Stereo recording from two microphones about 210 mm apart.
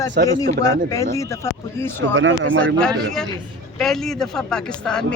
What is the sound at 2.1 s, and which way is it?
Speech, 65° right (ahead or behind).